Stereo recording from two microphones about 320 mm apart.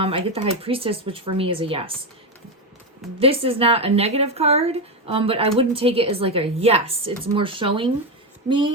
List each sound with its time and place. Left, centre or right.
0.0 s speech: centre
3.2 s speech: centre